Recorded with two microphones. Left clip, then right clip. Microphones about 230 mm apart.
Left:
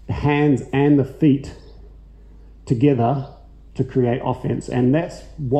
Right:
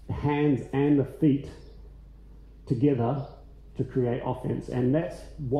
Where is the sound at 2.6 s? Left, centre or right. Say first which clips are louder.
Left 8 dB; left.